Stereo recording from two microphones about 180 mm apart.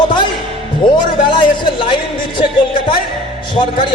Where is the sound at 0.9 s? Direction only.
25° left (ahead or behind).